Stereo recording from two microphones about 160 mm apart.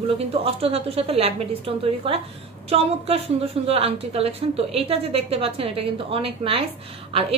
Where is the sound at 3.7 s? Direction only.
40° right (ahead or behind).